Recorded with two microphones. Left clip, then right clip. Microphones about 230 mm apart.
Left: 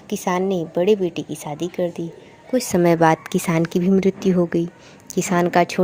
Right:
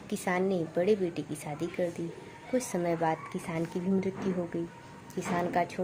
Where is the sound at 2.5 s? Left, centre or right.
Left.